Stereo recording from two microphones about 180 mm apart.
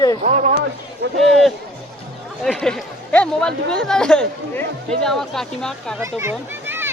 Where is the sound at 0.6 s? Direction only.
70° right (ahead or behind).